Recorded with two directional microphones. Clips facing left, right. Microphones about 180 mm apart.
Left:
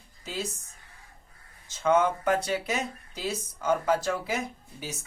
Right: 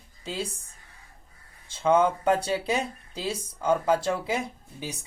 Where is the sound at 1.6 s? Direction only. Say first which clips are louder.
Right 2 dB; 30° right (ahead or behind).